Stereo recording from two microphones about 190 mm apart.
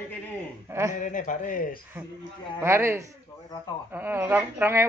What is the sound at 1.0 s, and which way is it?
Speech, 45° left (ahead or behind).